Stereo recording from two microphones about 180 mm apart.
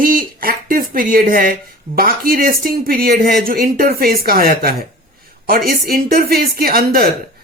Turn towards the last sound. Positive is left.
turn(degrees=-55)  # may be behind; listen again after turning